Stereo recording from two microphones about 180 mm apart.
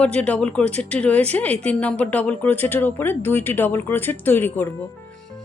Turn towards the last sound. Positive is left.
turn(degrees=10)  # may be behind; listen again after turning